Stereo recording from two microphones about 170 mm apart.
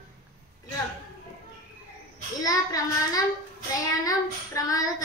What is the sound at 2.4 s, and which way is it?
Child singing, 20° left (ahead or behind).